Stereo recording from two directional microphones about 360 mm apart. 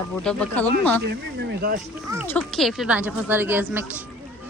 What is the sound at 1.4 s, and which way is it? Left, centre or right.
Speech, right.